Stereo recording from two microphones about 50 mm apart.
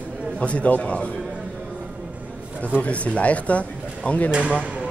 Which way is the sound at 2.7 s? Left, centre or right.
Left.